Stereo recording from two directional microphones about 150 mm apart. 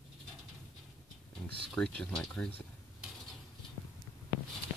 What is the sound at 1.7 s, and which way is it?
Speech, 5° left (ahead or behind).